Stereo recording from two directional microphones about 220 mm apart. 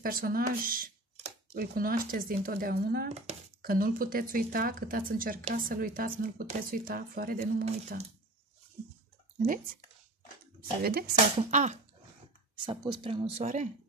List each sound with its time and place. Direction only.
0.0 s a woman's voice: 40° right (ahead or behind)
1.1 s a sound: 30° right (ahead or behind)
1.6 s a woman's voice: 40° right (ahead or behind)
3.3 s speech: 30° right (ahead or behind)
3.6 s a woman's voice: 40° right (ahead or behind)
7.6 s speech: 30° right (ahead or behind)
10.6 s speech: 45° right (ahead or behind)
11.5 s a woman's voice: 30° right (ahead or behind)
12.5 s speech: 20° right (ahead or behind)